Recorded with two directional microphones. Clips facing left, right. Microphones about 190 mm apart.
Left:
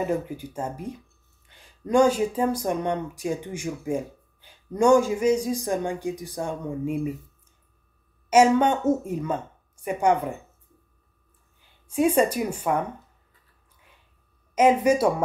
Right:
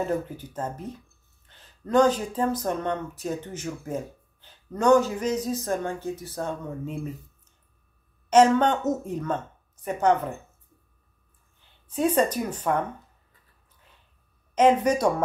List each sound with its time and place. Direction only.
0.0 s speech: 10° left (ahead or behind)
8.3 s speech: 10° left (ahead or behind)
11.9 s speech: 10° left (ahead or behind)
14.5 s speech: 10° left (ahead or behind)